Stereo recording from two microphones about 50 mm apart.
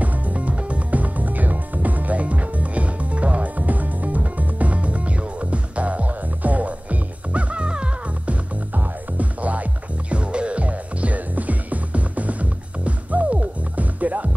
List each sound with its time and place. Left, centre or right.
0.0 s music: right